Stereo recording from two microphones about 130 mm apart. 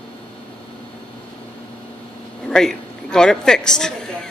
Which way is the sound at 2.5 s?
5° left (ahead or behind).